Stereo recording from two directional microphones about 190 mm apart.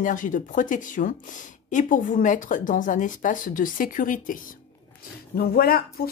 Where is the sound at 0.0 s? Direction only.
45° left (ahead or behind).